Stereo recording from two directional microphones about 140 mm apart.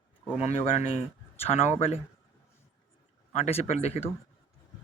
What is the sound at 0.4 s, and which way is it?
Speech, 50° left (ahead or behind).